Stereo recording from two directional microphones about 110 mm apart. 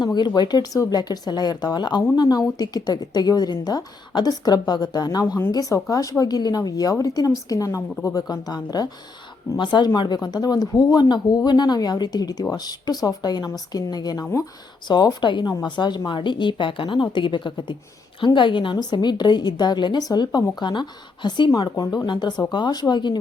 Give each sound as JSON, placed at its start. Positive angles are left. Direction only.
{"t": 0.0, "sound": "speech", "side_deg": 40}